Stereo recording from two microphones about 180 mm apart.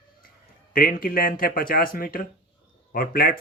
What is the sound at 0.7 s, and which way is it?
Speech, 50° left (ahead or behind).